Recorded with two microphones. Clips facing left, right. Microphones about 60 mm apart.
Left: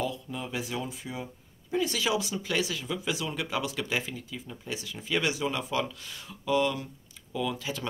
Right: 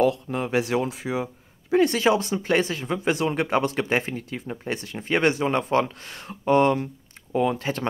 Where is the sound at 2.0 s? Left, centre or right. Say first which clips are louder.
Right 8 dB; right.